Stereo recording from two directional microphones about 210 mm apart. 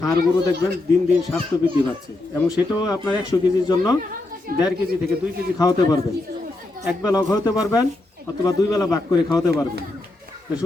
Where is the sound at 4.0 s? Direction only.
40° right (ahead or behind).